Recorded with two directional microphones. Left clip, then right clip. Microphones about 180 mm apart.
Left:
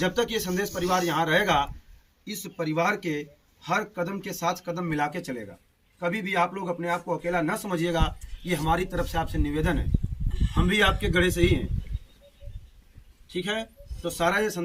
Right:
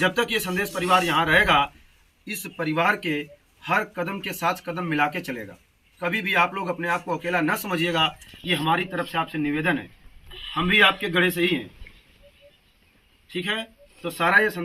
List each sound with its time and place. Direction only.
0.1 s a man's voice: 15° left (ahead or behind)
14.0 s speech: 20° left (ahead or behind)